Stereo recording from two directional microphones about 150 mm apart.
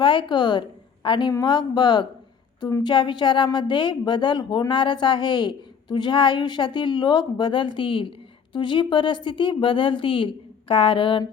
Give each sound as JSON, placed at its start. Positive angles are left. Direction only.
{"t": 0.0, "sound": "a woman's voice", "side_deg": 35}